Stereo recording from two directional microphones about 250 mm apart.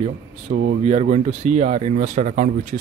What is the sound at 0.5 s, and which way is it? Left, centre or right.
Speech, right.